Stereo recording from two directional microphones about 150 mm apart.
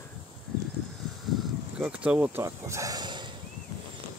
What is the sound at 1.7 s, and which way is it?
Speech, 10° right (ahead or behind).